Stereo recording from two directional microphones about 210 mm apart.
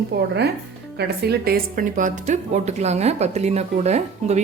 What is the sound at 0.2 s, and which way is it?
A woman's voice, 50° right (ahead or behind).